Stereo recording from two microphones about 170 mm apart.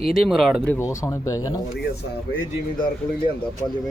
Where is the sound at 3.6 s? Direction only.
15° left (ahead or behind).